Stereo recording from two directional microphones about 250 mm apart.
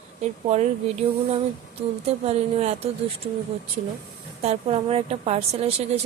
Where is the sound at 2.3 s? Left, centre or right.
Right.